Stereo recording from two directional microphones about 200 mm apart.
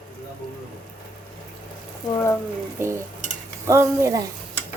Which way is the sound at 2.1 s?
15° left (ahead or behind).